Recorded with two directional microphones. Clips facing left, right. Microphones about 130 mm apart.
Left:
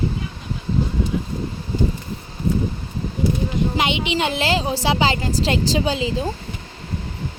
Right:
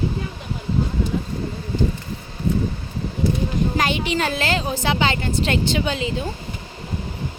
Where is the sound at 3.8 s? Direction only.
20° left (ahead or behind).